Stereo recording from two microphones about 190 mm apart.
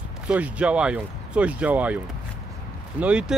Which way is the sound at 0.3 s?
5° right (ahead or behind).